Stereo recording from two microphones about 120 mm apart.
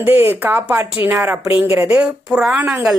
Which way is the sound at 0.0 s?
20° right (ahead or behind).